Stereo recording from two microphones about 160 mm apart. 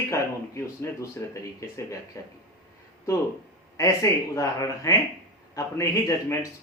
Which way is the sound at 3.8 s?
20° left (ahead or behind).